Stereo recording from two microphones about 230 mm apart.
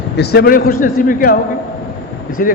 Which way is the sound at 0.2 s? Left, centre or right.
Left.